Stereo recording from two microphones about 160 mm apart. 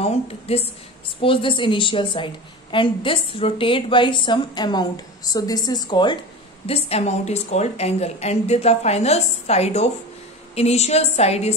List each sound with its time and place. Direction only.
0.0 s a woman's voice: 40° left (ahead or behind)
6.6 s a woman's voice: 40° left (ahead or behind)